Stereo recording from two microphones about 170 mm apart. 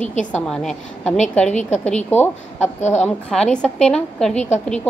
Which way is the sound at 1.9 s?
10° left (ahead or behind).